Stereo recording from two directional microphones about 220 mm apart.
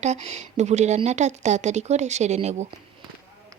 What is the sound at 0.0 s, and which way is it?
A woman's voice, 30° right (ahead or behind).